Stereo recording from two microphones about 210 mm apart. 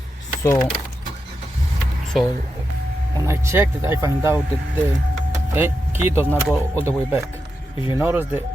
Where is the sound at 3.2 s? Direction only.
10° right (ahead or behind).